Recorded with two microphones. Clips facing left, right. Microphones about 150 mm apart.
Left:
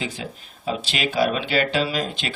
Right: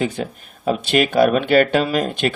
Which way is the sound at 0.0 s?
55° right (ahead or behind).